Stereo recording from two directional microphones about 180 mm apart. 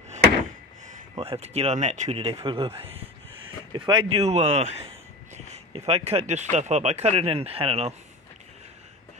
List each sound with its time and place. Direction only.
1.1 s speech: 30° right (ahead or behind)